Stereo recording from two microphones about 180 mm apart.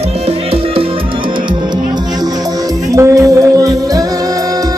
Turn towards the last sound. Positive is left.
turn(degrees=-20)  # may be behind; listen again after turning